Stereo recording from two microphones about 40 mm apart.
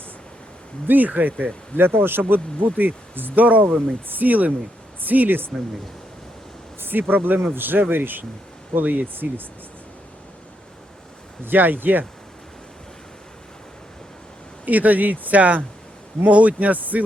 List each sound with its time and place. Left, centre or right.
0.9 s speech: right
1.7 s speech: right
3.7 s speech: centre
4.1 s speech: right
6.8 s speech: right
11.4 s speech: right
14.6 s speech: right